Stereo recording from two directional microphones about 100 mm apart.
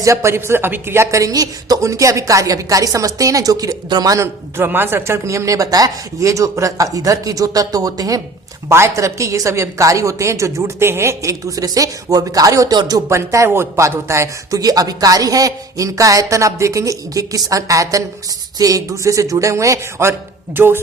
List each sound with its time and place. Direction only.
0.0 s a woman's voice: 30° right (ahead or behind)
13.1 s a woman's voice: 30° right (ahead or behind)